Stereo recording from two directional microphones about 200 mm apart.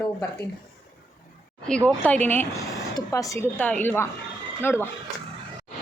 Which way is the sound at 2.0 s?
10° left (ahead or behind).